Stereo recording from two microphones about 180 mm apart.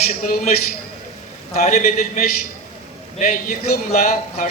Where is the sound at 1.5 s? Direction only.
40° left (ahead or behind).